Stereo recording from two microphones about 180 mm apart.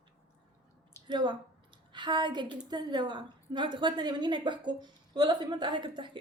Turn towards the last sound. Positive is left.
turn(degrees=-25)  # may be behind; listen again after turning